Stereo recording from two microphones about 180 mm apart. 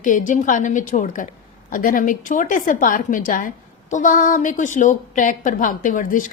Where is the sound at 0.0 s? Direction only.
45° left (ahead or behind).